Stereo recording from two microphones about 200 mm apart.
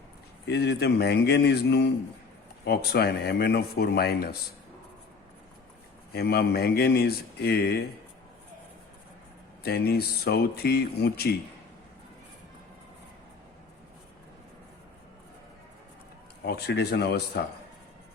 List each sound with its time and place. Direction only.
0.4 s speech: 55° left (ahead or behind)
6.1 s speech: 55° left (ahead or behind)
9.6 s speech: 50° left (ahead or behind)
16.4 s speech: 55° left (ahead or behind)